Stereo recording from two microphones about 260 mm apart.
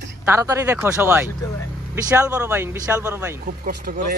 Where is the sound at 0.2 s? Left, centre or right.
Centre.